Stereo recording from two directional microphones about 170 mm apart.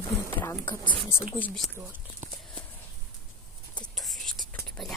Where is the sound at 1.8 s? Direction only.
10° right (ahead or behind).